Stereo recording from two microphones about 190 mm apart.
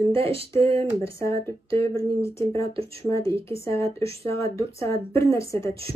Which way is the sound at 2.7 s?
30° right (ahead or behind).